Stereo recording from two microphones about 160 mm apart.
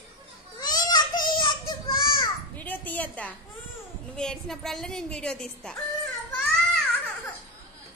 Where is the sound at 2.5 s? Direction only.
10° left (ahead or behind).